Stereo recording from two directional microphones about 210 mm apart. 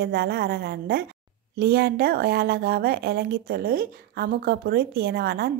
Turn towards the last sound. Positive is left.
turn(degrees=-50)  # may be behind; listen again after turning